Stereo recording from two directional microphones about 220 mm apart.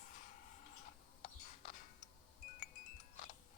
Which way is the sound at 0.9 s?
35° left (ahead or behind).